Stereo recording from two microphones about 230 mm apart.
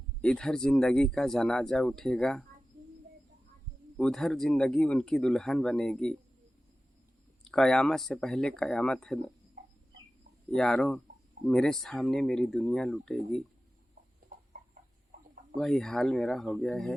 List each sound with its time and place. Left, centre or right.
0.2 s speech: centre
3.9 s speech: centre
7.4 s speech: centre
10.5 s speech: centre
14.3 s a sound: right
15.5 s speech: centre